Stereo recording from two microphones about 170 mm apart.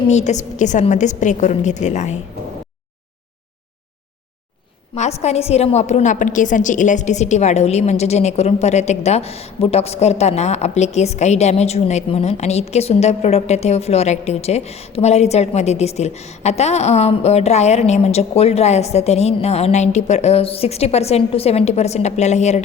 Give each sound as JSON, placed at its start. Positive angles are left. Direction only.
{"t": 0.1, "sound": "a woman's voice", "side_deg": 45}
{"t": 4.9, "sound": "a woman's voice", "side_deg": 40}